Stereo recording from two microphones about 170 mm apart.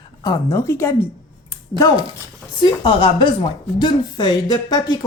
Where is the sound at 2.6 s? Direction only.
30° left (ahead or behind).